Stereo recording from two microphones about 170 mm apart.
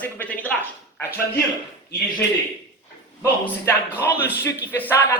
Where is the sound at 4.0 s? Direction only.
15° left (ahead or behind).